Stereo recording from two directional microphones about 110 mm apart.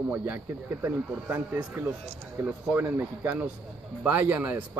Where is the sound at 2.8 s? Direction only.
20° right (ahead or behind).